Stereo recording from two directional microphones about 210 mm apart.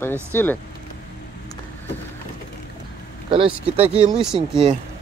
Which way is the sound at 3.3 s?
25° right (ahead or behind).